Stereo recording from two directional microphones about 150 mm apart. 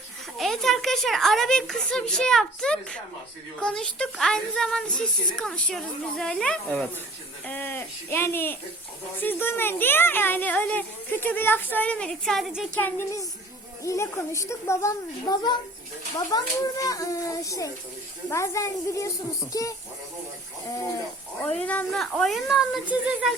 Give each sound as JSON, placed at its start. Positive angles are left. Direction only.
{"t": 0.3, "sound": "a woman's voice", "side_deg": 0}
{"t": 13.8, "sound": "a woman's voice", "side_deg": 20}
{"t": 21.4, "sound": "speech", "side_deg": 10}